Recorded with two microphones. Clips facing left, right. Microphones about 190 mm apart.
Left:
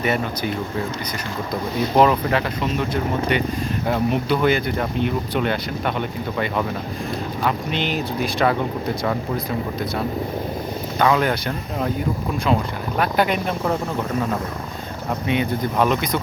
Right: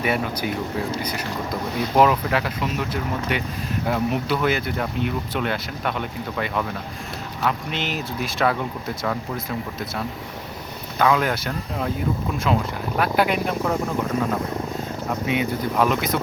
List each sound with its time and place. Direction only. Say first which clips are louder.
0.0 s speech: left 1 dB; 10° right (ahead or behind)
2.0 s speech: left 1 dB; 5° right (ahead or behind)
7.7 s speech: left 4 dB; centre (ahead or behind)
11.0 s speech: left 1 dB; centre (ahead or behind)
13.0 s speech: left 1 dB; 5° right (ahead or behind)
15.3 s speech: left 2 dB; 5° right (ahead or behind)